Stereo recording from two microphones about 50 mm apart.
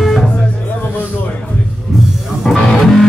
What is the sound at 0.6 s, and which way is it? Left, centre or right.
Music, left.